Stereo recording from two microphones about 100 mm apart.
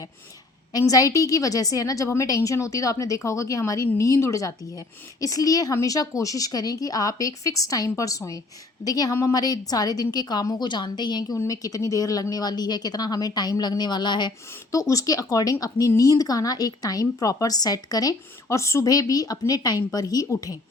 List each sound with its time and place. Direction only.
0.7 s a woman's voice: 35° left (ahead or behind)
14.7 s a woman's voice: 35° left (ahead or behind)